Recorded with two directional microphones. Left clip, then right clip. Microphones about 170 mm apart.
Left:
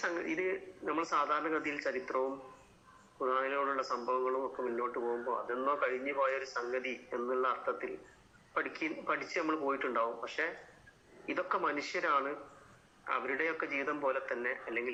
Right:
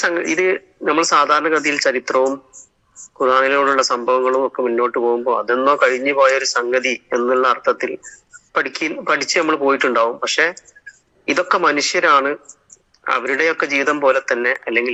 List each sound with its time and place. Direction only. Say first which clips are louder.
0.0 s speech: right 18 dB; 75° right (ahead or behind)